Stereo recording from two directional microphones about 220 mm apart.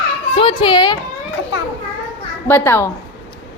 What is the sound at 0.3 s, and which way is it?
Speech, 20° left (ahead or behind).